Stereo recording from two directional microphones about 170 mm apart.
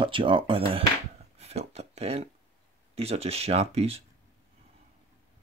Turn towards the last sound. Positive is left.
turn(degrees=-35)  # may be behind; listen again after turning